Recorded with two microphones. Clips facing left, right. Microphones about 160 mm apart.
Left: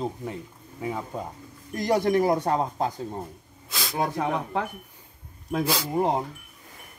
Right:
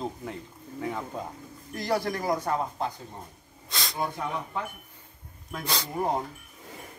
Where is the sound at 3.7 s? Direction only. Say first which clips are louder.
Left 2 dB; 5° left (ahead or behind).